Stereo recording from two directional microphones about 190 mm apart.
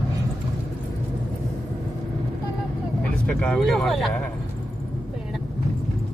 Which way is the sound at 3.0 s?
5° left (ahead or behind).